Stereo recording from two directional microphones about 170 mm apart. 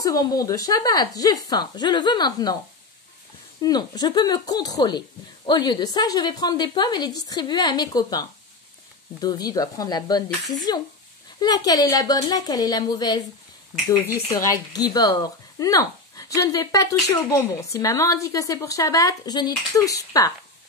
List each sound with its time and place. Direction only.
0.0 s speech: 20° left (ahead or behind)
3.6 s speech: 25° left (ahead or behind)